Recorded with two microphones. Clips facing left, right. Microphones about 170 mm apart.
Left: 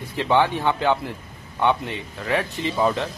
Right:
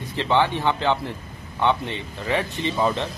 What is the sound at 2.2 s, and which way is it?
Speech, centre (ahead or behind).